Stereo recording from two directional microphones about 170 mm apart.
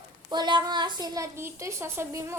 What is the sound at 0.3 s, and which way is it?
A child's voice, 25° right (ahead or behind).